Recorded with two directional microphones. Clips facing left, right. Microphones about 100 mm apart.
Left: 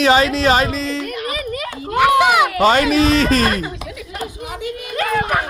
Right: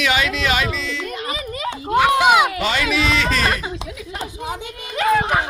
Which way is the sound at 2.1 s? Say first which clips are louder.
Left 2 dB; 20° right (ahead or behind).